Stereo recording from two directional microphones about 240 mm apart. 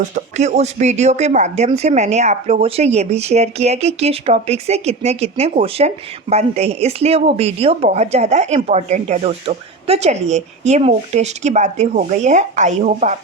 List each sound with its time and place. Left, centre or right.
0.1 s speech: right